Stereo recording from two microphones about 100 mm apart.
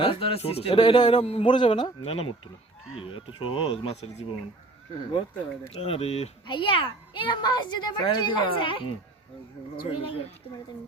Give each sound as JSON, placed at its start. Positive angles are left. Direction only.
{"t": 0.0, "sound": "speech", "side_deg": 65}
{"t": 0.8, "sound": "a child's voice", "side_deg": 45}
{"t": 1.2, "sound": "speech", "side_deg": 75}
{"t": 1.5, "sound": "speech", "side_deg": 55}
{"t": 5.7, "sound": "speech", "side_deg": 85}
{"t": 6.5, "sound": "a child's voice", "side_deg": 60}
{"t": 9.9, "sound": "speech", "side_deg": 70}